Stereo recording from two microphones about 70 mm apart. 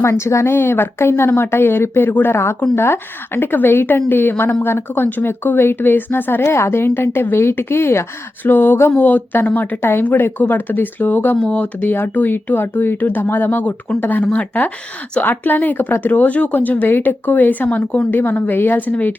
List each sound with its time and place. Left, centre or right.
0.0 s speech: left
11.3 s speech: centre